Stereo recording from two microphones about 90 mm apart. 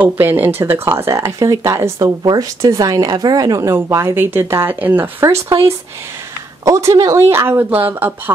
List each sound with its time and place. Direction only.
0.0 s speech: 20° right (ahead or behind); by 3.7 s 40° right (ahead or behind)
3.7 s speech: 30° right (ahead or behind)
5.2 s speech: 35° right (ahead or behind)
6.6 s speech: 35° right (ahead or behind)